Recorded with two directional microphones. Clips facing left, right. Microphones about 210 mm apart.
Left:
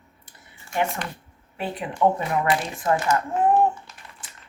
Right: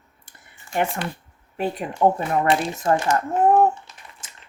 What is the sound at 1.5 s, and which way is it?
Speech, 45° right (ahead or behind).